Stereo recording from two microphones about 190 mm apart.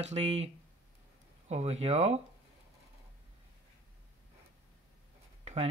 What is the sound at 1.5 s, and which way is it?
Speech, 35° right (ahead or behind).